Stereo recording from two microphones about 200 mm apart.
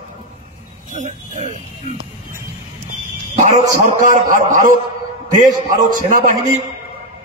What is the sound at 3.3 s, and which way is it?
A man's voice, 40° right (ahead or behind).